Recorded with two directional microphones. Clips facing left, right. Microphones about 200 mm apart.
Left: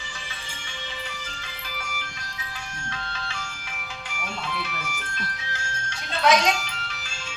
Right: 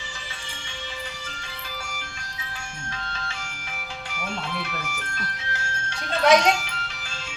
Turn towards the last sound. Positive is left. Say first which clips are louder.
# right 3 dB
turn(degrees=-55)  # may be behind; listen again after turning